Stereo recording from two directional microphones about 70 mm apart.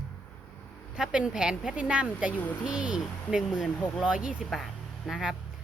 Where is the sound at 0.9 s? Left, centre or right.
Centre.